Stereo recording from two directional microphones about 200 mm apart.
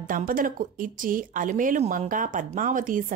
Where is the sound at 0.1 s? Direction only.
45° right (ahead or behind).